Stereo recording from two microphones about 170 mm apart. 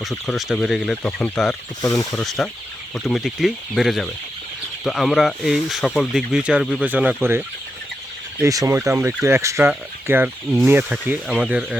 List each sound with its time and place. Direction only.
0.0 s speech: centre (ahead or behind)